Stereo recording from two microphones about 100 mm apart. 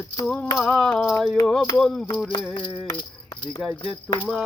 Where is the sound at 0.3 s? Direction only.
Centre (ahead or behind).